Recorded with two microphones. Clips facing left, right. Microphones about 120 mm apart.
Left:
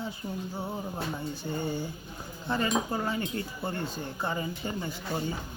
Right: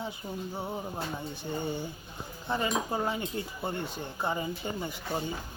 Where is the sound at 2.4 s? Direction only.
15° right (ahead or behind).